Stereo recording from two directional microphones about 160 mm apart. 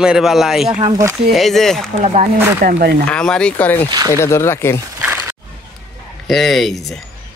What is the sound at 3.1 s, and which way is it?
Speech, 5° left (ahead or behind).